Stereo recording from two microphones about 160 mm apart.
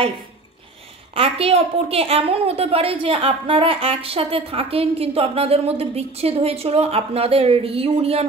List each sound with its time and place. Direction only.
1.1 s a woman's voice: 35° right (ahead or behind)